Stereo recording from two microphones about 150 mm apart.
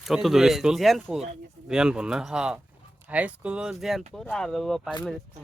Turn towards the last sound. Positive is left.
turn(degrees=0)  # may be behind; listen again after turning